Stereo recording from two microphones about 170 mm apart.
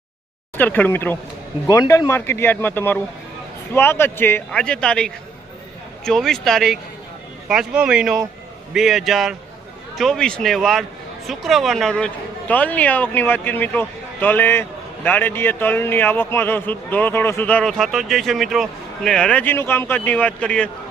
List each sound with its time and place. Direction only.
0.5 s speech: 10° left (ahead or behind)